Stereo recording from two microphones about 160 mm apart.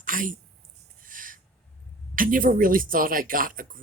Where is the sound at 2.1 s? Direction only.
60° right (ahead or behind).